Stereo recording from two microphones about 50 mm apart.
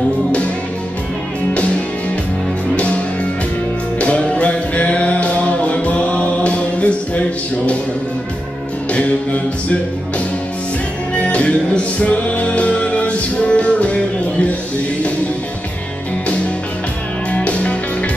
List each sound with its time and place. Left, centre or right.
2.7 s music: left
4.0 s music: left
8.9 s music: left
11.1 s music: left
17.3 s music: left